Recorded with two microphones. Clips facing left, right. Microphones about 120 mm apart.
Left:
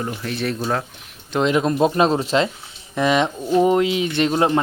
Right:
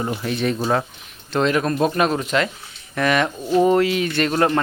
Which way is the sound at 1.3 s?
15° left (ahead or behind).